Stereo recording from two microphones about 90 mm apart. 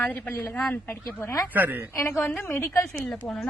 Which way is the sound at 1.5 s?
20° right (ahead or behind).